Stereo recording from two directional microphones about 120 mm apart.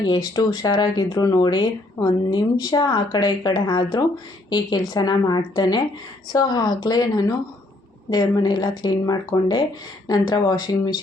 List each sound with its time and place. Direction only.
0.0 s speech: 35° left (ahead or behind)